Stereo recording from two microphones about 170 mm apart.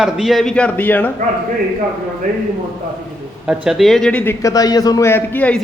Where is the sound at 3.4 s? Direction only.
5° right (ahead or behind).